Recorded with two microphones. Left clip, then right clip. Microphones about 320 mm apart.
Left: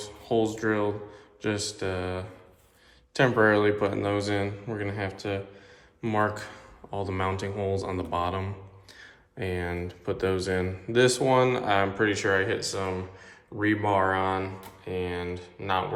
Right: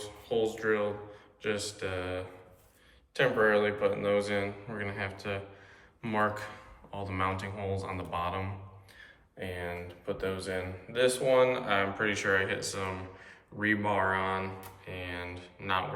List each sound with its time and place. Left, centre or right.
0.0 s speech: centre
9.0 s a sound: centre
10.1 s speech: centre